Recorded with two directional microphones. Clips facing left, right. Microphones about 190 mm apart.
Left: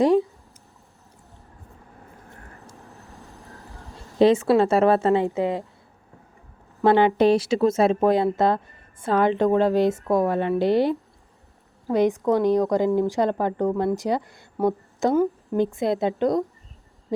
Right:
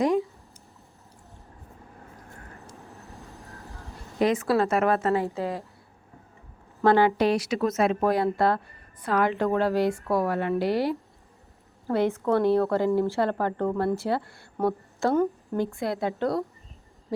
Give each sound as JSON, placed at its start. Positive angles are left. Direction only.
{"t": 3.9, "sound": "speech", "side_deg": 30}
{"t": 6.8, "sound": "a woman's voice", "side_deg": 20}